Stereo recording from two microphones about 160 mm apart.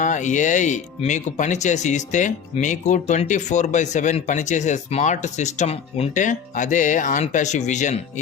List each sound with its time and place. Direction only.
0.0 s speech: 50° left (ahead or behind)